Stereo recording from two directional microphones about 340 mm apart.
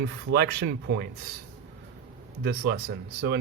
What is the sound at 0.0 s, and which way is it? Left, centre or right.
Speech, right.